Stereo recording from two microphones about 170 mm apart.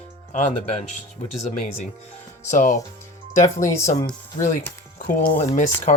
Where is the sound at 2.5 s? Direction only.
45° left (ahead or behind).